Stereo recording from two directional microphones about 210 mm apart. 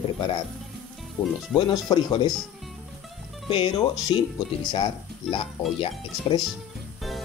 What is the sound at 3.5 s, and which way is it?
Speech, 20° left (ahead or behind).